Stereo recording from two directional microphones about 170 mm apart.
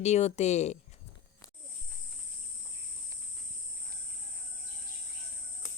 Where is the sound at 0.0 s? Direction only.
40° left (ahead or behind).